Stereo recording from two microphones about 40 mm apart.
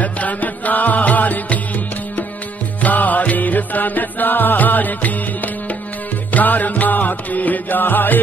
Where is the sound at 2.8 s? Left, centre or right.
Left.